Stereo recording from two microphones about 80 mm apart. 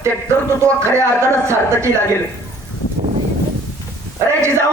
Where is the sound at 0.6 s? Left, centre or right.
Right.